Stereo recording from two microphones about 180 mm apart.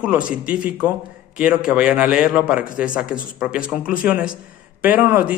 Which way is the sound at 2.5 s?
50° left (ahead or behind).